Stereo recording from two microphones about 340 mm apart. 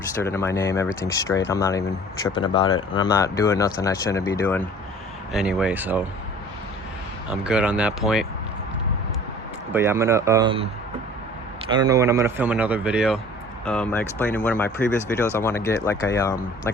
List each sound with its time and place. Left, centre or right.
0.2 s speech: centre
7.3 s speech: centre
9.7 s speech: centre